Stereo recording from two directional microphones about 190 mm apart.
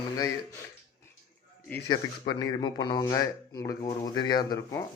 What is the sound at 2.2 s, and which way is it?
Speech, 25° left (ahead or behind).